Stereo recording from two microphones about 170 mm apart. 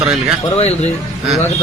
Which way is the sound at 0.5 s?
40° left (ahead or behind).